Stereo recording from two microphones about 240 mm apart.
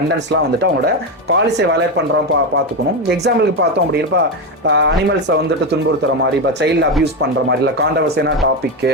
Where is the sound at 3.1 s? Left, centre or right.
Right.